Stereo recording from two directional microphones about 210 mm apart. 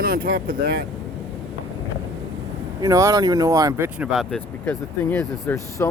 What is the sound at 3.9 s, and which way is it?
Speech, centre (ahead or behind).